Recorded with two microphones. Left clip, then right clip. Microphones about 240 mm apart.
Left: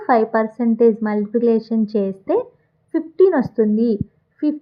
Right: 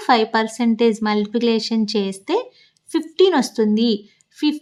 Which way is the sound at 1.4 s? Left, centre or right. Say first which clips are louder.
Left 2 dB; centre.